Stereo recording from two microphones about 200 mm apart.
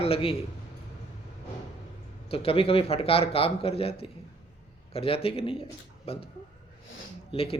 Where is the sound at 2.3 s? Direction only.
30° left (ahead or behind).